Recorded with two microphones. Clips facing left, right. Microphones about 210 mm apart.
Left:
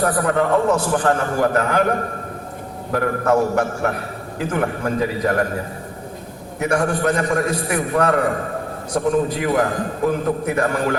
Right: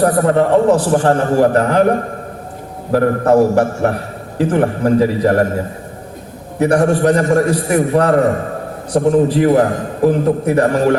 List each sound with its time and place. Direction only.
0.0 s a man's voice: 25° right (ahead or behind)
6.6 s a man's voice: 35° right (ahead or behind)